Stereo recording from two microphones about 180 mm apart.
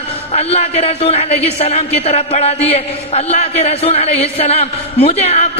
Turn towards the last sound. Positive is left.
turn(degrees=35)  # may be behind; listen again after turning